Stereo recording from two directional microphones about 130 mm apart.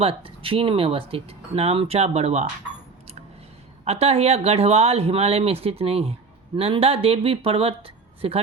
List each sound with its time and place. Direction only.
0.0 s speech: 45° right (ahead or behind)
3.8 s speech: 55° right (ahead or behind)